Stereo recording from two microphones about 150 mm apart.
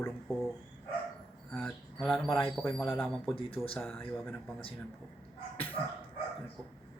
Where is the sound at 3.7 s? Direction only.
5° left (ahead or behind).